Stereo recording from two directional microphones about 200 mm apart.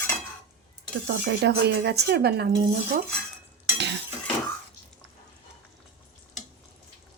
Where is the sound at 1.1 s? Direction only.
60° right (ahead or behind).